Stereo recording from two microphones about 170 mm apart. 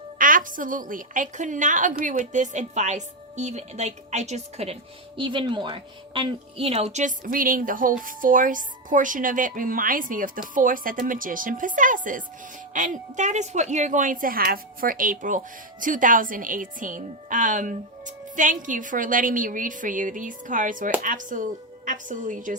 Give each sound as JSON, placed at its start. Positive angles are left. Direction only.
{"t": 0.2, "sound": "a woman's voice", "side_deg": -55}